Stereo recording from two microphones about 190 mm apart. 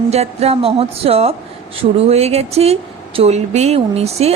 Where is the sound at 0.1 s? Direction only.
35° right (ahead or behind).